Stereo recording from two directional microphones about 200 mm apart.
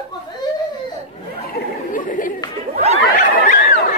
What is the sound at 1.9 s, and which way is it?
Chatter, 40° left (ahead or behind).